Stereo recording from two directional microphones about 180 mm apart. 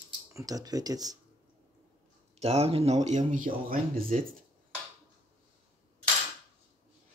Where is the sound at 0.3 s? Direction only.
20° right (ahead or behind).